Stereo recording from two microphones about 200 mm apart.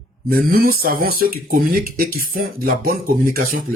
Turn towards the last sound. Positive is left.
turn(degrees=-45)  # may be behind; listen again after turning